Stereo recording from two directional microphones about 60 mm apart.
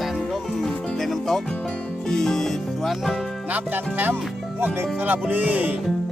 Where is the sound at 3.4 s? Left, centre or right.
Right.